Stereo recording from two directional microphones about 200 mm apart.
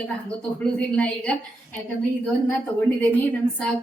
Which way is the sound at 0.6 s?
5° left (ahead or behind).